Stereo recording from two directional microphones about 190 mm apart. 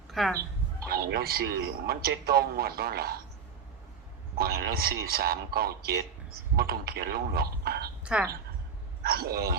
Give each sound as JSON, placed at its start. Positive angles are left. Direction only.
{"t": 0.1, "sound": "chicken", "side_deg": 0}
{"t": 0.9, "sound": "a man's voice", "side_deg": -55}
{"t": 4.4, "sound": "a man's voice", "side_deg": -55}
{"t": 8.0, "sound": "speech", "side_deg": -5}
{"t": 9.0, "sound": "a man's voice", "side_deg": -55}